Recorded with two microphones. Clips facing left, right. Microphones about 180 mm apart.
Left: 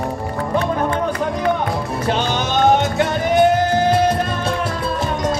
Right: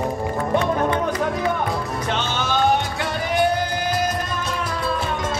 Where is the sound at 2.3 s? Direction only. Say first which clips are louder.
Left 4 dB; 20° left (ahead or behind).